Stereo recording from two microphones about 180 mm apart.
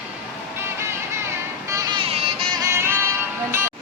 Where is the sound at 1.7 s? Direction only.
20° right (ahead or behind).